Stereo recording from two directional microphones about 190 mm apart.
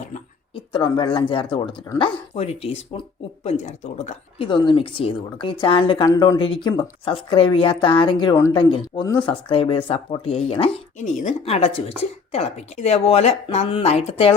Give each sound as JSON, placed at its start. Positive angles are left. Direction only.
{"t": 0.5, "sound": "speech", "side_deg": 25}